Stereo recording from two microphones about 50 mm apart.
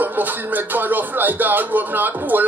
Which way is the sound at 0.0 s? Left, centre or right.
Right.